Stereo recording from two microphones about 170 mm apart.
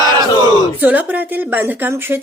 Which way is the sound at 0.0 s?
25° right (ahead or behind).